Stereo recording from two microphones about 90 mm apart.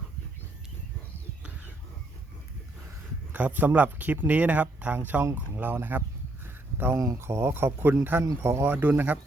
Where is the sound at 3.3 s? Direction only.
20° right (ahead or behind).